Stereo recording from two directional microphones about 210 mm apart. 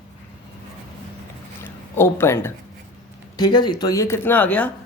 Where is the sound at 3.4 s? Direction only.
20° left (ahead or behind).